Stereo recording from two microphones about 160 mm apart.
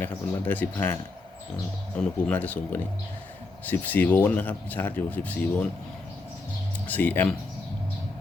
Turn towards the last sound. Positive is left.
turn(degrees=10)  # may be behind; listen again after turning